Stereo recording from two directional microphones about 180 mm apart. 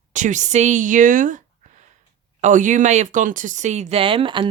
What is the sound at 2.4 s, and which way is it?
Speech, 45° right (ahead or behind).